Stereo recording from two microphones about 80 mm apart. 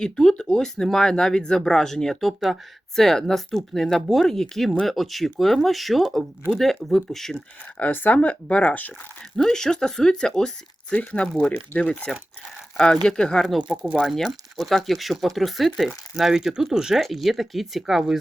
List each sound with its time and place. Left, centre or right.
0.0 s speech: centre
7.8 s speech: left
9.3 s speech: centre
14.0 s speech: centre